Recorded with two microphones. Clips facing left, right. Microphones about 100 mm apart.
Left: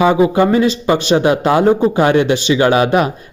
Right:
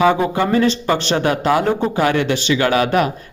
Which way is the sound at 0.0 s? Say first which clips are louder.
Left 4 dB; 20° left (ahead or behind).